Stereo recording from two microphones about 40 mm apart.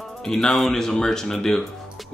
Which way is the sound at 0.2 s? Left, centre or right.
Centre.